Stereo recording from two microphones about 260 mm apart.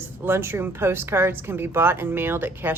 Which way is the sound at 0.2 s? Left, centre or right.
Centre.